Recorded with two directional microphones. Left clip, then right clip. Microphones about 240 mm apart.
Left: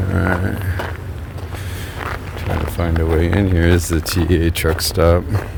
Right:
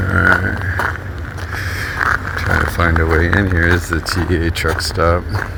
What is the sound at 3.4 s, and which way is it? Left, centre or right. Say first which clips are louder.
Speech: right 2 dB; left.